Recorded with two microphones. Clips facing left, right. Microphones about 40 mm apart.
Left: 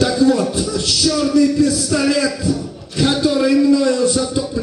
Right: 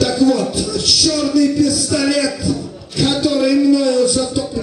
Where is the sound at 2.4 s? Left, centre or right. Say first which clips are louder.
Even; left.